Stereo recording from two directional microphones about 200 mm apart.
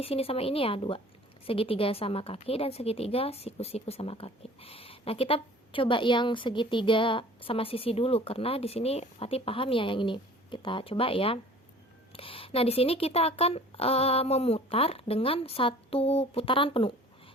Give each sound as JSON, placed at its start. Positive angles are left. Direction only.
{"t": 0.0, "sound": "a woman's voice", "side_deg": 30}